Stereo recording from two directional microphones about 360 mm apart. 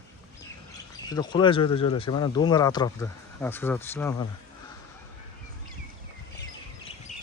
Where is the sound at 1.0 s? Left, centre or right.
Centre.